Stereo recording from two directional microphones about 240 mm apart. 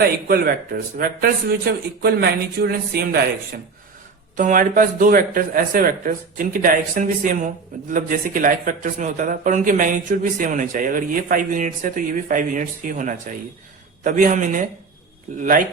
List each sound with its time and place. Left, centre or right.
0.0 s speech: right